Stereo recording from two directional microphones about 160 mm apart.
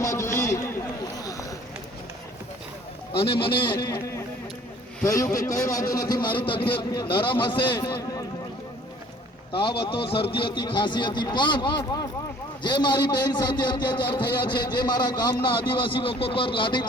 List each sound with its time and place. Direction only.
0.0 s a sound: 20° left (ahead or behind)
3.2 s speech: 35° left (ahead or behind)
5.0 s a man's voice: 20° left (ahead or behind)
9.5 s a man's voice: 30° left (ahead or behind)